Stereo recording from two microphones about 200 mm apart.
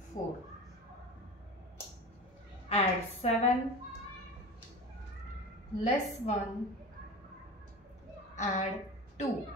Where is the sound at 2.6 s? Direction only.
30° left (ahead or behind).